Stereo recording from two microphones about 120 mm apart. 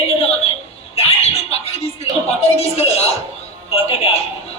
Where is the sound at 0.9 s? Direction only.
55° left (ahead or behind).